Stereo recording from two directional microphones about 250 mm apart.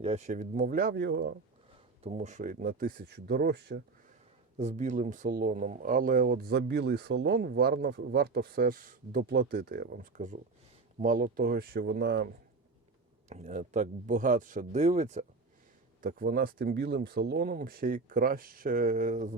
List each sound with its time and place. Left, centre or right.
0.0 s speech: right
2.0 s speech: right
4.5 s speech: right
13.3 s speech: right